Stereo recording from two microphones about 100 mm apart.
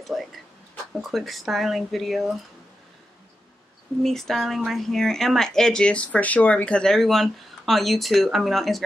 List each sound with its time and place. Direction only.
0.1 s speech: centre (ahead or behind)
4.0 s speech: 5° left (ahead or behind)